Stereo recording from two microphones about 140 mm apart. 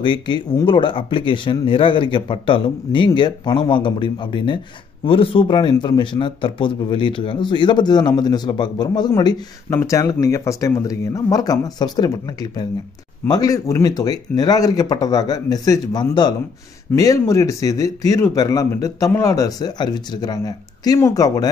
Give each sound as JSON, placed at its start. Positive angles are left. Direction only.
{"t": 0.0, "sound": "a man's voice", "side_deg": 35}